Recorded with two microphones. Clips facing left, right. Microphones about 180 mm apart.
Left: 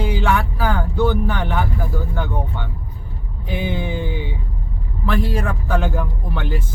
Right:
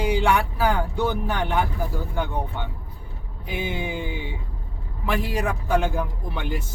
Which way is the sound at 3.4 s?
15° right (ahead or behind).